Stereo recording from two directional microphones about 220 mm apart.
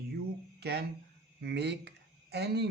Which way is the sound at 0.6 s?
50° right (ahead or behind).